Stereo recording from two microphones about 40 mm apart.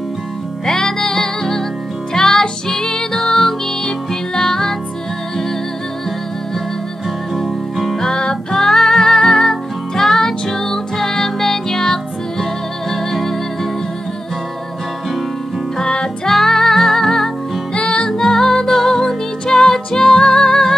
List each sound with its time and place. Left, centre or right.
0.7 s music: centre
7.7 s music: centre
8.0 s music: centre
15.8 s music: left
16.3 s music: centre
17.7 s music: centre